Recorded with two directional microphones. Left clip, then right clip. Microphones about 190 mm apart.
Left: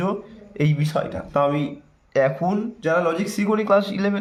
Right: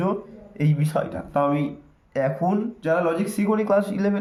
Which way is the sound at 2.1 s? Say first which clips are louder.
Left 3 dB; 40° left (ahead or behind).